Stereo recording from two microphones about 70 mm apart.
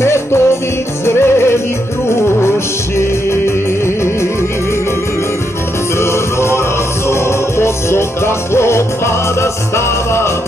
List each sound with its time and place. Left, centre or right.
0.0 s music: left
3.8 s music: left
5.9 s music: left